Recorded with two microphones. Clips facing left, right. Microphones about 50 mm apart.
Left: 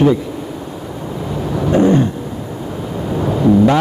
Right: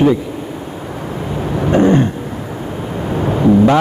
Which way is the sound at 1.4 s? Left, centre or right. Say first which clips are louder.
Right 1 dB; right.